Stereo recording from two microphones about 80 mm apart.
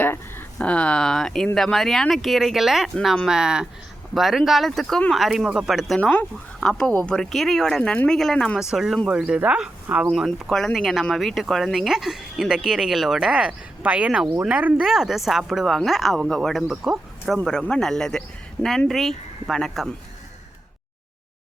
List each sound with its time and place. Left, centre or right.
0.0 s a sound: left
0.6 s speech: centre
5.1 s speech: centre
6.0 s speech: left
6.6 s speech: centre
8.5 s speech: centre
10.5 s speech: centre
14.8 s speech: centre